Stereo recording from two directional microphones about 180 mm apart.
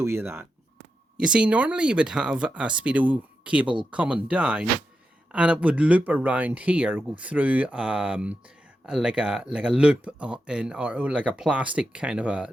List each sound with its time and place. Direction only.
0.0 s speech: 15° right (ahead or behind)